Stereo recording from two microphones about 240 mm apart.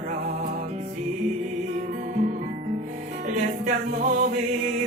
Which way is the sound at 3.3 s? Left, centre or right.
Right.